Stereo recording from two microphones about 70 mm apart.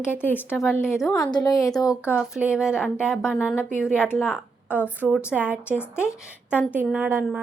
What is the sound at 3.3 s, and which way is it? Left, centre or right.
Speech, centre.